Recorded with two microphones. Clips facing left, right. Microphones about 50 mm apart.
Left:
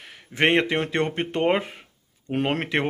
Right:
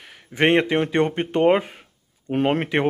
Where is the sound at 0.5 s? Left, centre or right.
Right.